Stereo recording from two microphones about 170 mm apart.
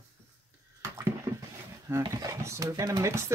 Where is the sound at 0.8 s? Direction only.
15° right (ahead or behind).